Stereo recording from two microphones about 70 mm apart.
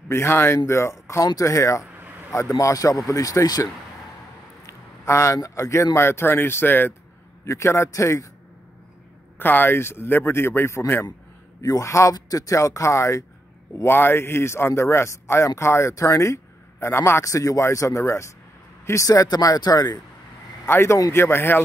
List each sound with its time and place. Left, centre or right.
0.1 s speech: left
2.0 s a sound: right
2.6 s speech: left
4.6 s speech: left
7.4 s speech: left
9.4 s speech: left
11.6 s speech: left
13.8 s speech: left
19.2 s speech: left
20.6 s speech: left